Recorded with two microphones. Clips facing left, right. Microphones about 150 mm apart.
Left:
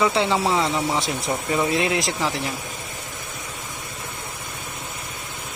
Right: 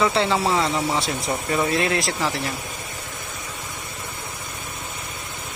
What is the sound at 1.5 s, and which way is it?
Speech, 15° left (ahead or behind).